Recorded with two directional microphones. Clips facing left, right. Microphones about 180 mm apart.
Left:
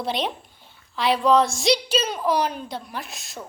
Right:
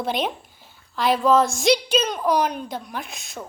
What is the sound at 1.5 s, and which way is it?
Speech, 50° right (ahead or behind).